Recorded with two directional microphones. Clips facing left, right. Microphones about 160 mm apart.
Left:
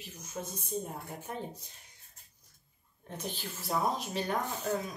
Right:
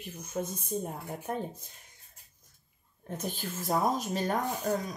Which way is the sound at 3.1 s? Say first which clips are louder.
Right 4 dB; 45° right (ahead or behind).